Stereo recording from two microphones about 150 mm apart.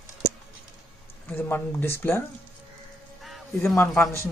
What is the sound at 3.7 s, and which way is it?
Speech, 15° left (ahead or behind).